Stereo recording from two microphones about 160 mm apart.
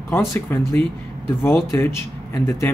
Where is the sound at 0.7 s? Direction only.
15° left (ahead or behind).